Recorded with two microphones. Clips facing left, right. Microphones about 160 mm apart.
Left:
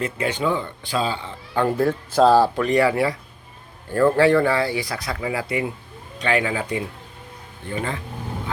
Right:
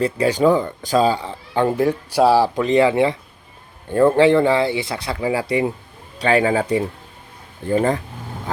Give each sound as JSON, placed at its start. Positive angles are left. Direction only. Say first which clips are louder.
{"t": 0.0, "sound": "speech", "louder": "right 7 dB", "side_deg": -35}
{"t": 1.5, "sound": "speech", "louder": "right 2 dB", "side_deg": -20}
{"t": 2.6, "sound": "speech", "louder": "right 3 dB", "side_deg": -20}